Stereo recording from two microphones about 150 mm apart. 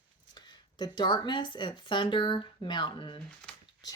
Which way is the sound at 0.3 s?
30° left (ahead or behind).